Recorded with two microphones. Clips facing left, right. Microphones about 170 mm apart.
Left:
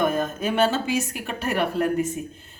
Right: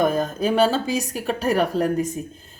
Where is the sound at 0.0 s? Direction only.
35° right (ahead or behind).